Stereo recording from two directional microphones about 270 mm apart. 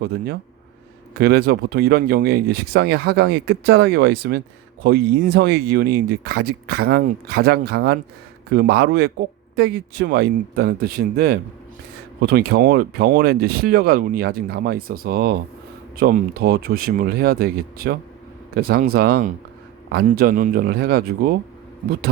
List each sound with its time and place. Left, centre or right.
0.0 s speech: right